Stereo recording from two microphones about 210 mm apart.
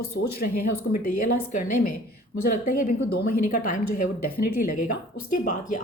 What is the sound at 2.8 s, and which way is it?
A woman's voice, 40° left (ahead or behind).